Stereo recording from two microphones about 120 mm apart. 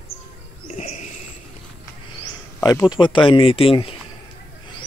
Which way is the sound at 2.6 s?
30° left (ahead or behind).